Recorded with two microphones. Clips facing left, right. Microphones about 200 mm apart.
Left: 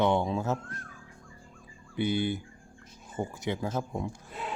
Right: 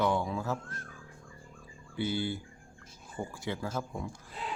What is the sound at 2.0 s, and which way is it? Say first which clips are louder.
Speech: left 4 dB; 20° left (ahead or behind).